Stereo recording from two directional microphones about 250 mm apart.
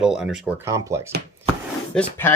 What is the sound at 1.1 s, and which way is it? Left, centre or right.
Speech, right.